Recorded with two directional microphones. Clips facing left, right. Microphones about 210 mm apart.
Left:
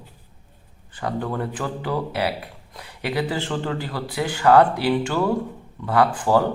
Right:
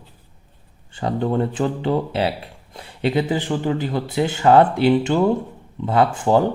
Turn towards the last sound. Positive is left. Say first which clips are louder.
# right 2 dB
turn(degrees=-25)  # may be behind; listen again after turning